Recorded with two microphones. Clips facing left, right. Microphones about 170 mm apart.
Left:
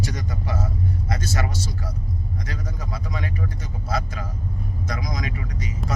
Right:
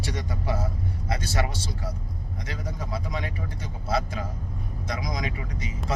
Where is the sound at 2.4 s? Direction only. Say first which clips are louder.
Left 1 dB; 30° right (ahead or behind).